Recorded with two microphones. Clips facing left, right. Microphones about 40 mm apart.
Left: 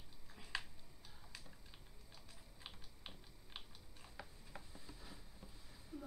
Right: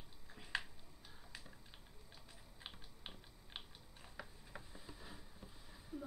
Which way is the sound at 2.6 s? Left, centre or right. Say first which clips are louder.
Right 2 dB; right.